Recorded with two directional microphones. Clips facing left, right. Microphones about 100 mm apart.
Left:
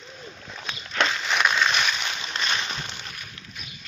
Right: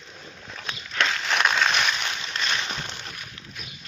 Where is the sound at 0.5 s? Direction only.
15° left (ahead or behind); by 3.4 s 5° right (ahead or behind).